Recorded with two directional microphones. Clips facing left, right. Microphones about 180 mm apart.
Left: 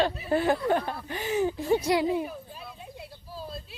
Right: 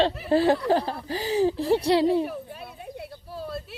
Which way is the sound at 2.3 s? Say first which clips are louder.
Right 5 dB; 65° right (ahead or behind).